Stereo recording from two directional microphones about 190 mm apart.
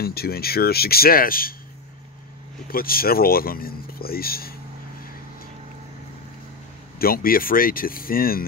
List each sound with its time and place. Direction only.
0.0 s speech: 55° left (ahead or behind)
2.7 s speech: 50° left (ahead or behind)
7.0 s speech: 50° left (ahead or behind)